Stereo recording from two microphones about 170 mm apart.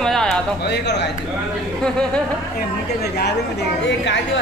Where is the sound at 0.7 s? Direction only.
80° left.